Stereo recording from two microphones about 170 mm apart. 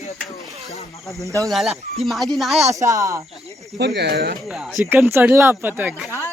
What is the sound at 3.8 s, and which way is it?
Speech, 85° right.